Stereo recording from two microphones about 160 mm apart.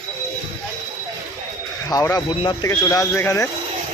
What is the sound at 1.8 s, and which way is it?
Speech, 20° left (ahead or behind).